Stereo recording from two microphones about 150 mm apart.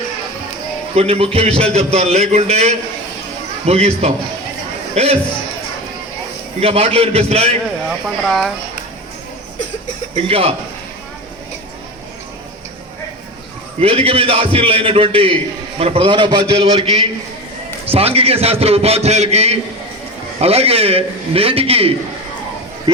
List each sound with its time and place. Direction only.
0.9 s a man's voice: 40° right (ahead or behind)
6.6 s a man's voice: 40° right (ahead or behind)
7.9 s speech: centre (ahead or behind)
10.2 s a man's voice: 40° right (ahead or behind)
13.8 s a man's voice: 40° right (ahead or behind)